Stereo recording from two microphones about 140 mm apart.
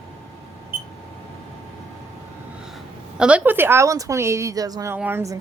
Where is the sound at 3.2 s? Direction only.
10° right (ahead or behind).